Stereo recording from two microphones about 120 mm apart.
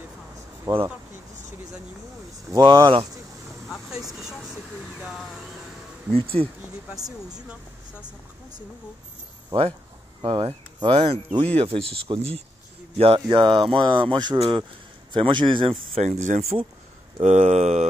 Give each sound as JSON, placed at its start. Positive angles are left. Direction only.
{"t": 0.7, "sound": "speech", "side_deg": -30}
{"t": 2.6, "sound": "speech", "side_deg": -40}
{"t": 3.6, "sound": "vehicle", "side_deg": 0}
{"t": 5.0, "sound": "speech", "side_deg": 0}
{"t": 6.1, "sound": "speech", "side_deg": -50}
{"t": 10.2, "sound": "speech", "side_deg": -45}
{"t": 15.9, "sound": "speech", "side_deg": -70}
{"t": 17.2, "sound": "speech", "side_deg": -80}